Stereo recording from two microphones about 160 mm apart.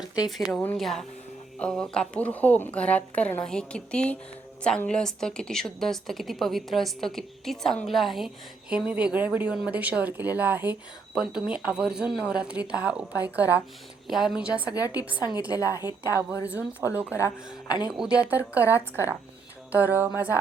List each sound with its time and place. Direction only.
0.3 s a woman's voice: centre (ahead or behind)
14.7 s a woman's voice: 25° left (ahead or behind)
14.9 s speech: 10° right (ahead or behind)
15.5 s a woman's voice: 20° left (ahead or behind)
16.9 s speech: 10° right (ahead or behind)
17.2 s a woman's voice: 20° left (ahead or behind)
17.8 s speech: 5° right (ahead or behind)
18.7 s a woman's voice: 15° left (ahead or behind)
20.1 s speech: 10° right (ahead or behind)